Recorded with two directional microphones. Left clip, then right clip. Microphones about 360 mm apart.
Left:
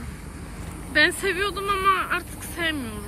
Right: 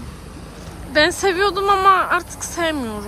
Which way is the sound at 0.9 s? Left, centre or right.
Centre.